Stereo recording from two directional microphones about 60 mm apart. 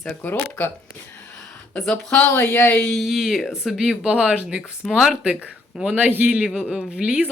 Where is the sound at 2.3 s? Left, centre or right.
Left.